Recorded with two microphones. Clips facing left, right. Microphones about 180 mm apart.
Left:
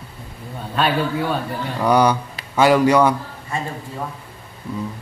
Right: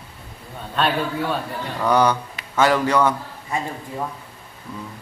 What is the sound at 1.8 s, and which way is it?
A man's voice, 10° left (ahead or behind).